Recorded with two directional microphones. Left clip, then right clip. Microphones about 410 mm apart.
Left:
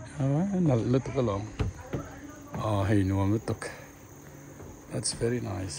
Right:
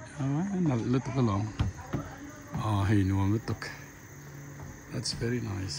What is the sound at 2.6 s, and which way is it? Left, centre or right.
Speech, centre.